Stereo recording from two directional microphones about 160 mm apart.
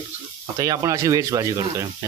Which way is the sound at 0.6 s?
20° right (ahead or behind).